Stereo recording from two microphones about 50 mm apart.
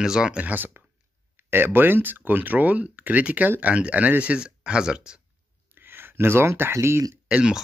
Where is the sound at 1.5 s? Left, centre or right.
Right; by 5.2 s centre.